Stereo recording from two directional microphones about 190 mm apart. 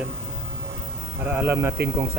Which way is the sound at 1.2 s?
10° right (ahead or behind).